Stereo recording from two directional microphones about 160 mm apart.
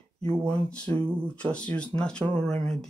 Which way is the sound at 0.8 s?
35° right (ahead or behind).